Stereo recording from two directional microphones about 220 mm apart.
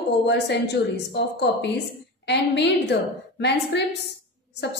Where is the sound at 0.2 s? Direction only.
50° left (ahead or behind).